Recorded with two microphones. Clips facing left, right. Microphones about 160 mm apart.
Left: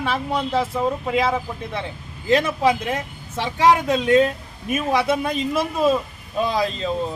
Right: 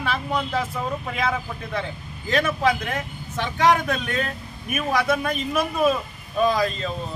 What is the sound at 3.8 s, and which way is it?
A man's voice, 25° left (ahead or behind).